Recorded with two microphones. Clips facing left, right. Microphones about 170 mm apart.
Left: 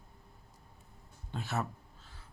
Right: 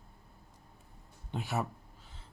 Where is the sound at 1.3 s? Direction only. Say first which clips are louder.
Right 1 dB; 15° right (ahead or behind).